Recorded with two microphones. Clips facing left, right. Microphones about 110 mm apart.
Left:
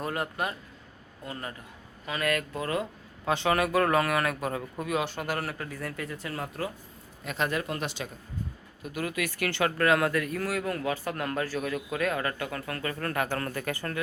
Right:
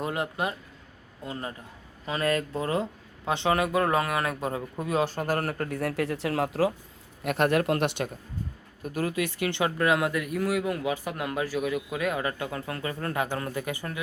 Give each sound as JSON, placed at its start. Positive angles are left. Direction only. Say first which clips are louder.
{"t": 0.0, "sound": "speech", "louder": "right 2 dB", "side_deg": -20}
{"t": 7.3, "sound": "speech", "louder": "right 7 dB", "side_deg": -65}
{"t": 8.8, "sound": "speech", "louder": "right 3 dB", "side_deg": -40}